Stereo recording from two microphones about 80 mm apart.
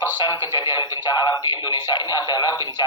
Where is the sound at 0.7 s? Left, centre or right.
Left.